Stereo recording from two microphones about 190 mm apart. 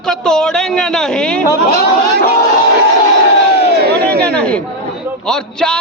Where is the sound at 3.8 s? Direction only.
60° right (ahead or behind).